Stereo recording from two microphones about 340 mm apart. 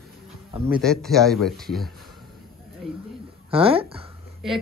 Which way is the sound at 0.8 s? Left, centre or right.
Centre.